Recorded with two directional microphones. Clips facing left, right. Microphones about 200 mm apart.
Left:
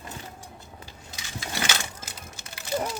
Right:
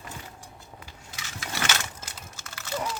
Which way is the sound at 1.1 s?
15° left (ahead or behind).